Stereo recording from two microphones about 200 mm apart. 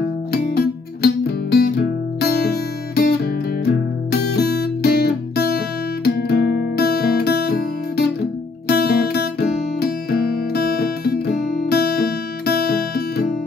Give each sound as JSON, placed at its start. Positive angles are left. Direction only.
{"t": 0.3, "sound": "music", "side_deg": 50}
{"t": 3.6, "sound": "guitar", "side_deg": 50}
{"t": 6.0, "sound": "music", "side_deg": 50}